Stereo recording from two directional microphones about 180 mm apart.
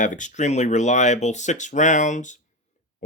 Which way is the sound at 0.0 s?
45° left (ahead or behind).